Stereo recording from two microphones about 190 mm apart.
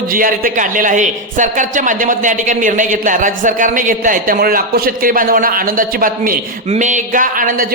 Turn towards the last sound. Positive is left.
turn(degrees=-50)  # may be behind; listen again after turning